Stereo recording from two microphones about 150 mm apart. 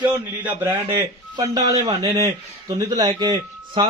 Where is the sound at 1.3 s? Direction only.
25° right (ahead or behind).